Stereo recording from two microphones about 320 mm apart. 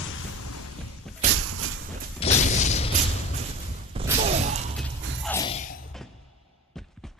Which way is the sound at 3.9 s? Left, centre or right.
Centre.